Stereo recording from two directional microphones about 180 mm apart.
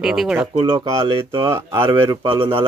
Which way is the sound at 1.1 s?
30° right (ahead or behind).